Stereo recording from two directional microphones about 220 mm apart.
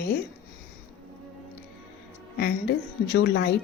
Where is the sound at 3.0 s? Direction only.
50° left (ahead or behind).